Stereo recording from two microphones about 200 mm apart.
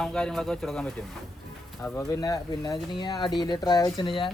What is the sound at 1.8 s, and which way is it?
Speech, 15° left (ahead or behind).